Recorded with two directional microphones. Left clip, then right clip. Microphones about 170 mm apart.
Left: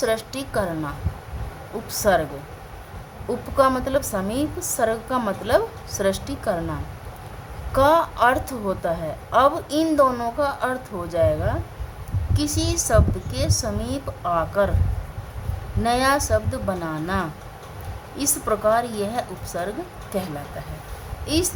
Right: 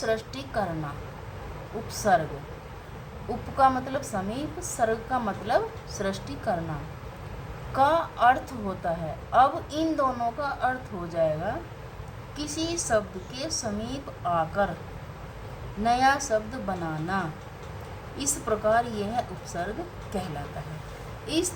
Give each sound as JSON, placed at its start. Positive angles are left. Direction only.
{"t": 0.0, "sound": "a woman's voice", "side_deg": 65}
{"t": 1.9, "sound": "a woman's voice", "side_deg": 65}
{"t": 3.6, "sound": "a woman's voice", "side_deg": 65}
{"t": 7.7, "sound": "a woman's voice", "side_deg": 65}
{"t": 15.8, "sound": "a woman's voice", "side_deg": 65}